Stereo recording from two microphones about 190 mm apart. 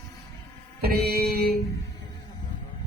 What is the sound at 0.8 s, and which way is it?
Mantra, 55° right (ahead or behind).